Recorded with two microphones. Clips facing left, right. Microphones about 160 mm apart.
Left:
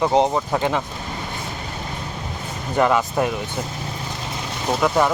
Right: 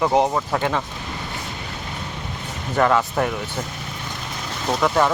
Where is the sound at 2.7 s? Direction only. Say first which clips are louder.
Even; 15° left (ahead or behind).